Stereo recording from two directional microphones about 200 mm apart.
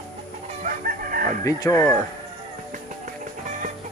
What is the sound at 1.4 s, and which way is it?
Speech, 15° left (ahead or behind).